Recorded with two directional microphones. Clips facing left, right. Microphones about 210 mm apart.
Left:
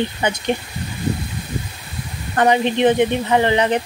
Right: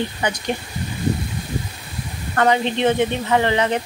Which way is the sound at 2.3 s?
20° left (ahead or behind).